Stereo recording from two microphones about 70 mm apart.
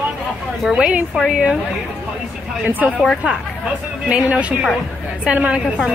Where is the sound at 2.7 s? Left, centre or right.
Right.